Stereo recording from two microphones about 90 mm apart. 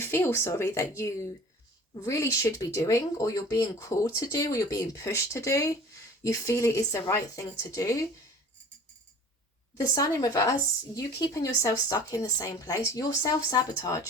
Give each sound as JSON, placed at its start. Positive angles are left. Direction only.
{"t": 0.0, "sound": "speech", "side_deg": 25}
{"t": 9.7, "sound": "speech", "side_deg": 40}